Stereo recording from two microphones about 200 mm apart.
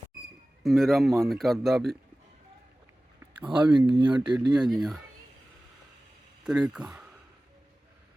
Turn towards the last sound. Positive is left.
turn(degrees=-5)  # may be behind; listen again after turning